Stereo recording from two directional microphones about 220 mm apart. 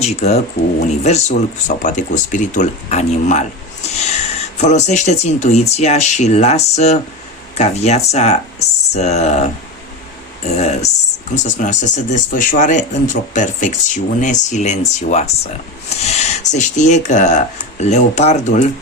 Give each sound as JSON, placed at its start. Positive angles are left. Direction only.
{"t": 0.0, "sound": "speech", "side_deg": 30}